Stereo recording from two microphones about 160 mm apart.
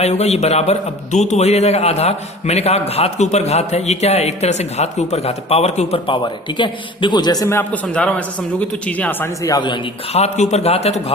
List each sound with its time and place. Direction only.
0.0 s a man's voice: 45° left (ahead or behind)
6.2 s a man's voice: 30° left (ahead or behind)
7.9 s a man's voice: 5° left (ahead or behind); by 11.0 s 40° left (ahead or behind)